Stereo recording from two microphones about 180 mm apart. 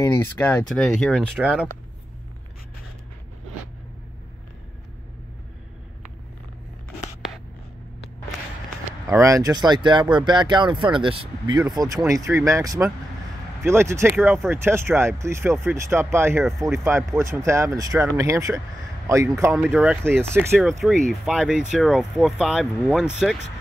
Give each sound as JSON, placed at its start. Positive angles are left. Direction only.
{"t": 0.0, "sound": "speech", "side_deg": 15}
{"t": 0.7, "sound": "speech", "side_deg": 0}
{"t": 9.0, "sound": "speech", "side_deg": -15}
{"t": 16.4, "sound": "speech", "side_deg": 0}
{"t": 16.7, "sound": "speech", "side_deg": -15}
{"t": 20.8, "sound": "speech", "side_deg": 0}